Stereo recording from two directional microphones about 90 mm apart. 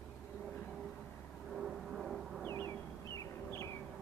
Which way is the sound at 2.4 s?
30° left (ahead or behind).